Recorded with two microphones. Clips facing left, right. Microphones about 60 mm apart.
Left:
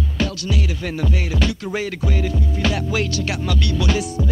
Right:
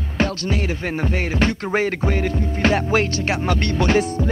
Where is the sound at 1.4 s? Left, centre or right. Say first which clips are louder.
Right 6 dB; right.